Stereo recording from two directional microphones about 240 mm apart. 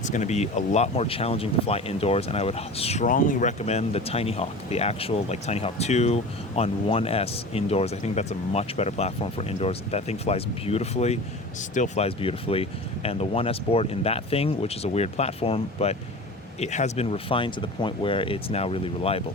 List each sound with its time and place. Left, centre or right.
0.0 s speech: left